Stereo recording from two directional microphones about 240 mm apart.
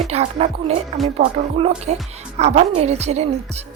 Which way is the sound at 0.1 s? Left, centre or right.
Right.